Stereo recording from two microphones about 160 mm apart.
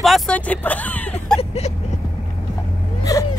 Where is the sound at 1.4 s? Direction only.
40° left (ahead or behind).